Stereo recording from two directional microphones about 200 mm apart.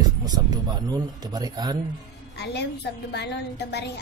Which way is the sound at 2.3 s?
55° left (ahead or behind).